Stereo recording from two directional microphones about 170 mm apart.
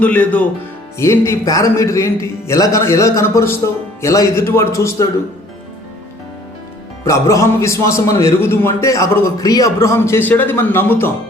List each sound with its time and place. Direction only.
0.0 s a man's voice: 10° left (ahead or behind)
7.0 s a man's voice: 15° left (ahead or behind)